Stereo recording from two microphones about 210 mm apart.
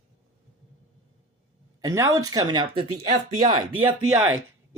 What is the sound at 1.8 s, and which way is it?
Speech, 15° right (ahead or behind).